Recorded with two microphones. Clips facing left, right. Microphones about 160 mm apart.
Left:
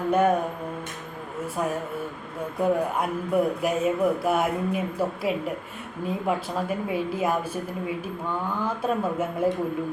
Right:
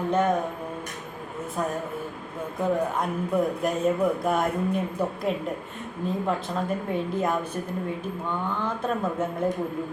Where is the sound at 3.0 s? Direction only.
5° left (ahead or behind).